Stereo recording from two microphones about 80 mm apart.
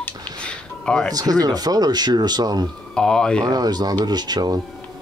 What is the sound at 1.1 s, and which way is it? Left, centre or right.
Speech, right.